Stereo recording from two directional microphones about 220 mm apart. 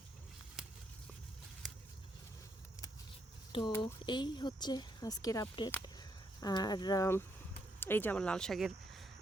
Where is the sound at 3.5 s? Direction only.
25° left (ahead or behind).